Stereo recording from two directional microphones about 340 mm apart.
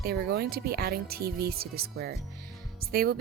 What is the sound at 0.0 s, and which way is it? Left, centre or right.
Speech, right.